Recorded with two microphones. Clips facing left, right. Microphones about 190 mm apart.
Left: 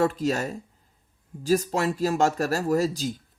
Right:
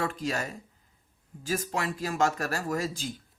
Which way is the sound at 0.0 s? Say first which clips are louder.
Left 7 dB; 40° left (ahead or behind).